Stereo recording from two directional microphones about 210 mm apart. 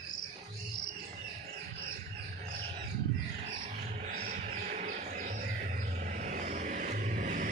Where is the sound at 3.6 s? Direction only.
35° right (ahead or behind).